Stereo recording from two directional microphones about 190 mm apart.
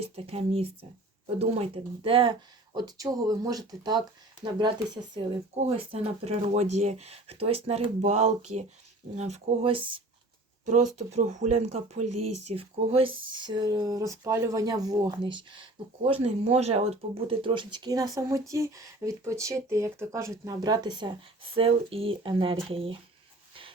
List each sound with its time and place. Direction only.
0.0 s speech: 30° right (ahead or behind)
5.2 s speech: 25° right (ahead or behind)